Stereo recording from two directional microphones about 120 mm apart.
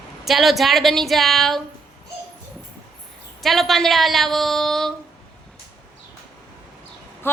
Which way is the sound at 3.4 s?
Centre (ahead or behind).